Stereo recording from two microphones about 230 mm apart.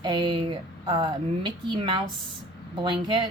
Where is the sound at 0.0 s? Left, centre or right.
Right.